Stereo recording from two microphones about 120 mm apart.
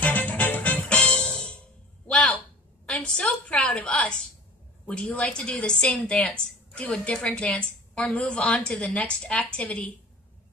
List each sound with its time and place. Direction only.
0.0 s music: 15° left (ahead or behind)
2.9 s a woman's voice: 10° left (ahead or behind)